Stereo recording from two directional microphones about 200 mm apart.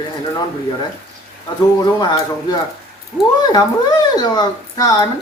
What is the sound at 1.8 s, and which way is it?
Speech, 20° left (ahead or behind).